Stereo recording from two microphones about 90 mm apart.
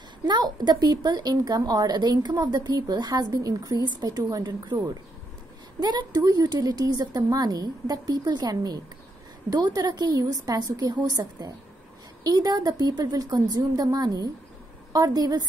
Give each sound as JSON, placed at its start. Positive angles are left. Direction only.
{"t": 0.2, "sound": "a woman's voice", "side_deg": -55}